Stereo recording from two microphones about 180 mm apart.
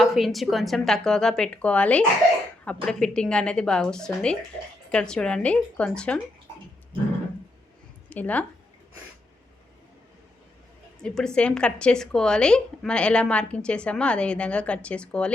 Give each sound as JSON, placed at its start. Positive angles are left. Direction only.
{"t": 0.0, "sound": "a woman's voice", "side_deg": 0}
{"t": 8.1, "sound": "speech", "side_deg": 10}
{"t": 11.0, "sound": "a woman's voice", "side_deg": 5}